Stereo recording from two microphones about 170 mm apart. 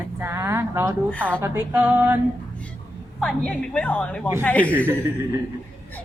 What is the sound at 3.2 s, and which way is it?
A woman's voice, 5° left (ahead or behind).